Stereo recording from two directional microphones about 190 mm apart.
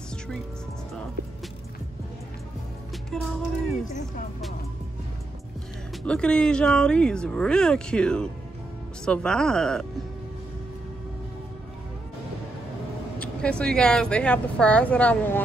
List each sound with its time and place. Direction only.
3.1 s speech: 5° left (ahead or behind)
6.0 s speech: 5° left (ahead or behind)
13.2 s speech: 5° left (ahead or behind)